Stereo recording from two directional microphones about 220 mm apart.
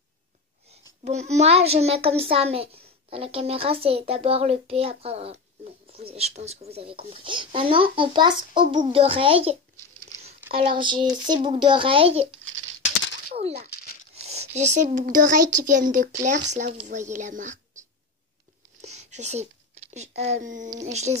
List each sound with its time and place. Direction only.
1.0 s a child's voice: 30° right (ahead or behind)
10.1 s a sound: 15° left (ahead or behind)
10.5 s a child's voice: 25° right (ahead or behind)
13.3 s speech: 30° right (ahead or behind)
18.8 s a sound: 30° right (ahead or behind)
19.9 s speech: 30° right (ahead or behind)